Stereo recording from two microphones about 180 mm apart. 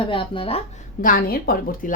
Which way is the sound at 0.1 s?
30° left (ahead or behind).